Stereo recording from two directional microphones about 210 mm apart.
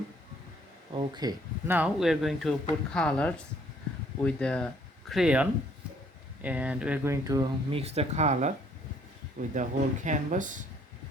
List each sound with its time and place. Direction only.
0.9 s speech: 20° right (ahead or behind)
7.8 s speech: 30° right (ahead or behind)
9.6 s speech: 35° right (ahead or behind)